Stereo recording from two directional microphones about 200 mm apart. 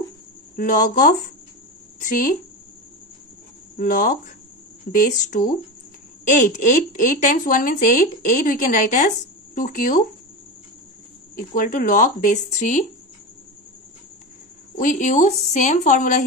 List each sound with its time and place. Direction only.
0.6 s a woman's voice: 40° left (ahead or behind)
3.7 s a woman's voice: 40° left (ahead or behind)
11.3 s a woman's voice: 45° left (ahead or behind)
14.8 s a woman's voice: 40° left (ahead or behind)